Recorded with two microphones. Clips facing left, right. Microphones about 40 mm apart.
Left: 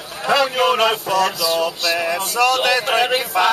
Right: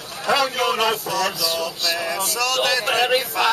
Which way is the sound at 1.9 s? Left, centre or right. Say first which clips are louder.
Left 5 dB; left.